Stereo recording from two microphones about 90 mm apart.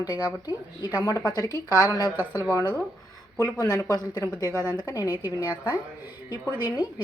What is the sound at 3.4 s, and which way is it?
Speech, 40° left (ahead or behind).